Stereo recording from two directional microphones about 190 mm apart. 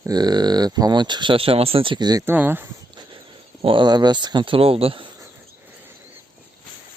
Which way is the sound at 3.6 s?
25° right (ahead or behind).